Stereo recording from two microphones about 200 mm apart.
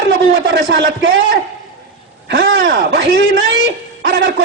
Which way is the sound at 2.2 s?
60° right (ahead or behind).